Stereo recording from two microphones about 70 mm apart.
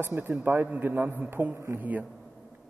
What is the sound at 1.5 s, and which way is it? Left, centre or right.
Speech, right.